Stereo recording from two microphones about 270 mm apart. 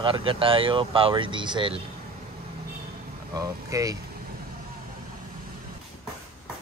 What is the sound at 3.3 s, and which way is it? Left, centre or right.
Speech, centre.